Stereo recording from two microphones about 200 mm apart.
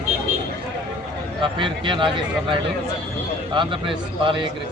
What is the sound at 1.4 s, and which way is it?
Speech, 25° right (ahead or behind).